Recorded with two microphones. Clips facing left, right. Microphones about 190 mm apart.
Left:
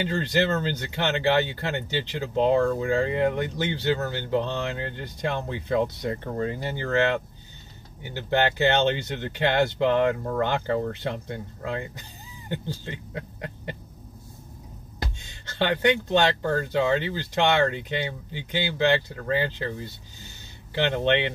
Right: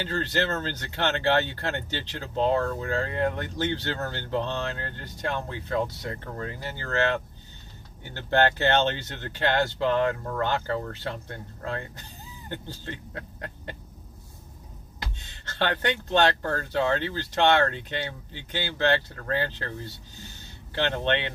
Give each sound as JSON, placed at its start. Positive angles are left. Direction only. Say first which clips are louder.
{"t": 0.0, "sound": "speech", "louder": "left 3 dB", "side_deg": 15}
{"t": 8.0, "sound": "speech", "louder": "right 1 dB", "side_deg": 15}
{"t": 15.1, "sound": "speech", "louder": "left 2 dB", "side_deg": 15}